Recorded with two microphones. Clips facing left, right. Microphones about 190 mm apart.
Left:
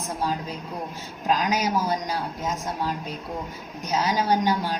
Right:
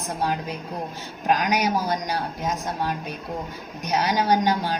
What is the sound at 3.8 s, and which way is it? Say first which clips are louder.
Speech: right 1 dB; 65° right (ahead or behind).